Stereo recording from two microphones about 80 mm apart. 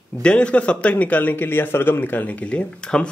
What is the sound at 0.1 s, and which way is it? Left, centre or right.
A man's voice, centre.